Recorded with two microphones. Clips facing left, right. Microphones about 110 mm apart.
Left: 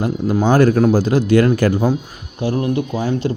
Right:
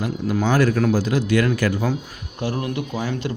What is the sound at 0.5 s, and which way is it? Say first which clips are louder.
Speech: left 6 dB; 45° left (ahead or behind).